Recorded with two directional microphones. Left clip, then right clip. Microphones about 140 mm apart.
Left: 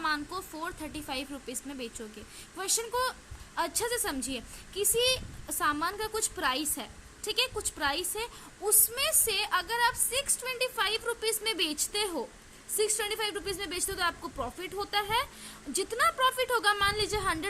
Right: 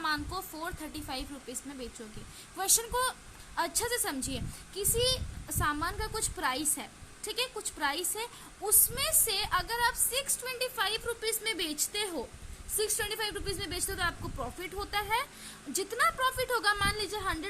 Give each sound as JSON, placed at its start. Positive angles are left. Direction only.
{"t": 0.0, "sound": "a woman's voice", "side_deg": 15}